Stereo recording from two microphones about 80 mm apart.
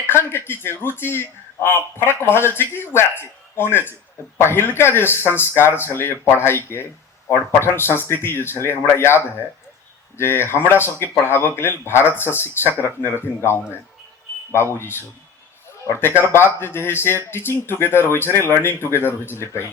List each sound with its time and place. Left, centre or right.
0.1 s a man's voice: left